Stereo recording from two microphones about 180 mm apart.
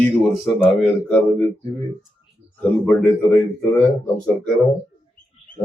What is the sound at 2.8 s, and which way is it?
Speech, 5° left (ahead or behind).